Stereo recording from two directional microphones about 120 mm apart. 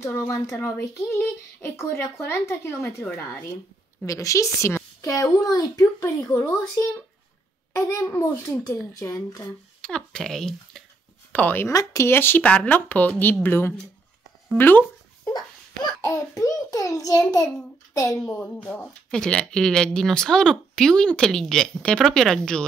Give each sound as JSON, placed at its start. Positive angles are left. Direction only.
{"t": 0.3, "sound": "speech", "side_deg": 20}
{"t": 9.8, "sound": "speech", "side_deg": 5}
{"t": 11.3, "sound": "speech", "side_deg": 15}
{"t": 11.7, "sound": "speech", "side_deg": 30}
{"t": 15.2, "sound": "a child's voice", "side_deg": 30}
{"t": 18.2, "sound": "speech", "side_deg": 10}